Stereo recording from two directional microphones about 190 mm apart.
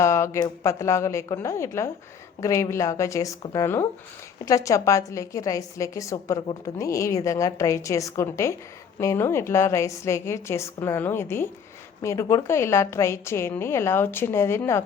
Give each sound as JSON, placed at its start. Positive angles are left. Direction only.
{"t": 0.0, "sound": "a woman's voice", "side_deg": 15}